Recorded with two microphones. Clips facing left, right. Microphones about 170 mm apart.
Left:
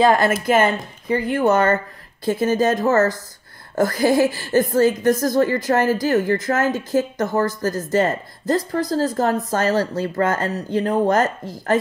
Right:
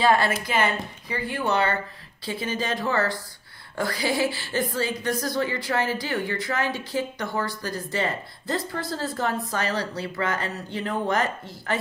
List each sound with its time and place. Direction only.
0.0 s a woman's voice: 45° left (ahead or behind)